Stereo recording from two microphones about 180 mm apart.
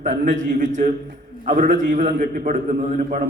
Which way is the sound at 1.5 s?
45° right (ahead or behind).